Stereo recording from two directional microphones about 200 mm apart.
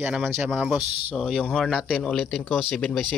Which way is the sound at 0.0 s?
10° right (ahead or behind).